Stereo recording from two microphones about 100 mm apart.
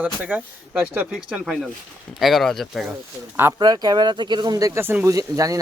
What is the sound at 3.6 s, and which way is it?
Speech, 45° right (ahead or behind).